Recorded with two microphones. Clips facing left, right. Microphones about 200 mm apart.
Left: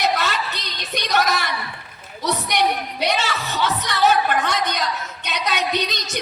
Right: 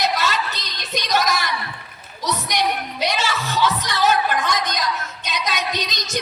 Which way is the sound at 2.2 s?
60° left (ahead or behind).